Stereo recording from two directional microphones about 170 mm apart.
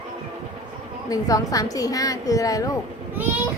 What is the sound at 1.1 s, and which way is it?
A woman's voice, 20° left (ahead or behind).